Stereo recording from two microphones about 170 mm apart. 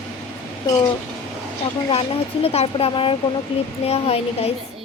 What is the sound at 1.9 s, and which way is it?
Speech, 35° left (ahead or behind).